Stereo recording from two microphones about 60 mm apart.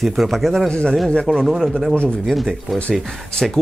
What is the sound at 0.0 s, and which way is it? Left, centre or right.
Speech, centre.